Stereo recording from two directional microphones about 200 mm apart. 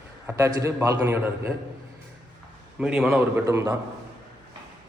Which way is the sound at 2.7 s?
5° right (ahead or behind).